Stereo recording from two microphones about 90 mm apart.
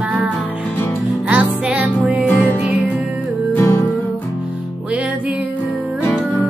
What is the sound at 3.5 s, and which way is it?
Music, 30° left (ahead or behind).